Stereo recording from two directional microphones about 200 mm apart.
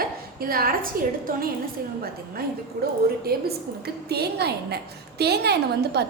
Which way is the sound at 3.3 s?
50° right (ahead or behind).